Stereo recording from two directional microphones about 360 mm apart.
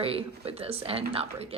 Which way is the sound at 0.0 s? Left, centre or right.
Centre.